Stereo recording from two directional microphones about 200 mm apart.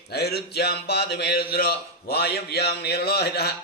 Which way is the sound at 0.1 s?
55° left (ahead or behind).